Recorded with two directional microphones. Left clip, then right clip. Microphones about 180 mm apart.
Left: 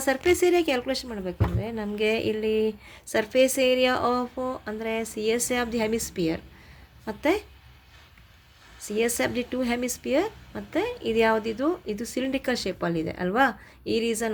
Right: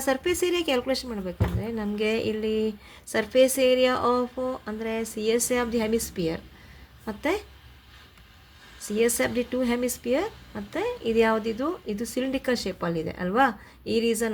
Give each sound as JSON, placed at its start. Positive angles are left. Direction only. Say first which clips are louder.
{"t": 0.0, "sound": "speech", "louder": "left 3 dB", "side_deg": 20}
{"t": 8.9, "sound": "speech", "louder": "right 1 dB", "side_deg": 20}